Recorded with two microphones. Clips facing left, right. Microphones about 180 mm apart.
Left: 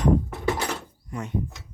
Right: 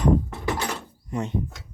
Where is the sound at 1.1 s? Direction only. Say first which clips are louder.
Right 5 dB; 25° right (ahead or behind).